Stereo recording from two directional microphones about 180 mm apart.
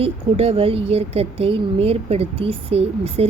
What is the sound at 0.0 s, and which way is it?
Speech, 30° right (ahead or behind).